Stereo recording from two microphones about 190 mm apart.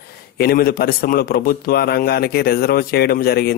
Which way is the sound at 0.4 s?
55° left (ahead or behind).